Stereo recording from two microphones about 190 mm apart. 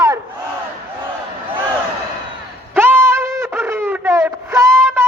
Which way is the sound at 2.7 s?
10° right (ahead or behind).